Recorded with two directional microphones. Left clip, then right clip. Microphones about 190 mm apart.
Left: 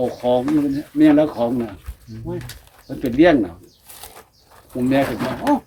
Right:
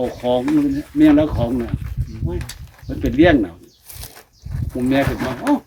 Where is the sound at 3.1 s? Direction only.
10° right (ahead or behind).